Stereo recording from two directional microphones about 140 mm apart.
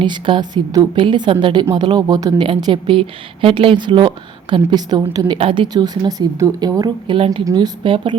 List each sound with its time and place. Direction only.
0.0 s a woman's voice: 35° right (ahead or behind)